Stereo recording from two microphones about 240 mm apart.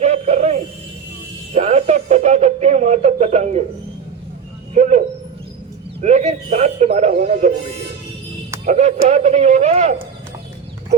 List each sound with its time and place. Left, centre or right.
0.0 s a sound: right
4.7 s speech: right
8.6 s speech: right